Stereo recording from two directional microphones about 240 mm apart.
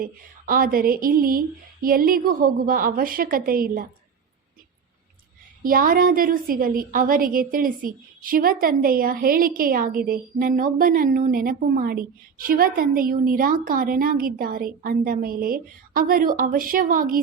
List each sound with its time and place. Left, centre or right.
0.0 s a woman's voice: right
5.6 s a woman's voice: right